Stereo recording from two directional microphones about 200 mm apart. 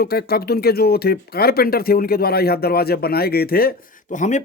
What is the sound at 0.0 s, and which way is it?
Speech, 50° left (ahead or behind).